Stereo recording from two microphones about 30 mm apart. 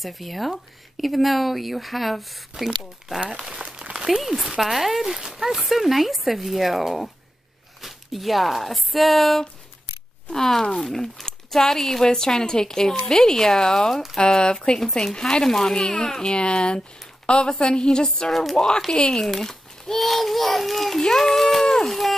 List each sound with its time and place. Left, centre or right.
0.0 s speech: centre
3.4 s a sound: right
3.9 s a sound: centre
4.2 s speech: centre
7.8 s speech: centre
10.3 s a child's voice: centre
14.2 s a child's voice: left
15.4 s a child's voice: centre
18.3 s speech: centre
18.9 s a child's voice: left; by 21.0 s centre
21.0 s a sound: centre